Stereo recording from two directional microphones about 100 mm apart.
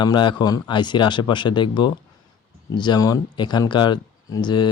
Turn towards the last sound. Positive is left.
turn(degrees=50)  # may be behind; listen again after turning